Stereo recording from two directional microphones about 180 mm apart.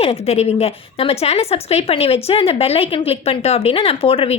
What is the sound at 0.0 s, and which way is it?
Speech, 35° left (ahead or behind).